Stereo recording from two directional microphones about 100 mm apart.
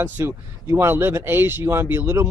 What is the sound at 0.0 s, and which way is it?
Speech, 25° right (ahead or behind).